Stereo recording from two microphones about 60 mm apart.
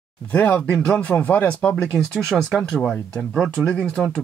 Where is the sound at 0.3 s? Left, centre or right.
Left.